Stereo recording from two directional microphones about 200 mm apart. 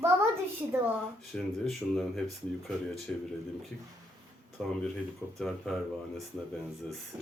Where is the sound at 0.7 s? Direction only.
10° right (ahead or behind).